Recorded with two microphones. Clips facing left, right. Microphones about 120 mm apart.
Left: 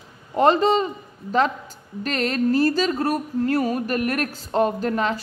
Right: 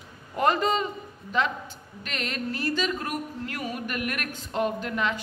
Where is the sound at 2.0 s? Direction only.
40° left (ahead or behind).